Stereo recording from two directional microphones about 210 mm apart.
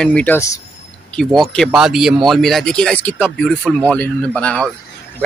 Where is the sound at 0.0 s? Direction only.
5° left (ahead or behind).